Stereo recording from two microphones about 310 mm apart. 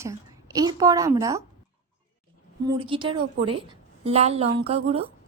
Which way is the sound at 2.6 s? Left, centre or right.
Centre.